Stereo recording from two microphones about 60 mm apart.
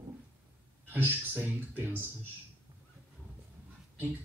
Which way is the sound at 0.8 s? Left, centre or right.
Right.